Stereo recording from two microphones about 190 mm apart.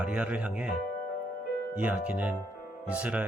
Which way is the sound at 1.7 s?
10° right (ahead or behind).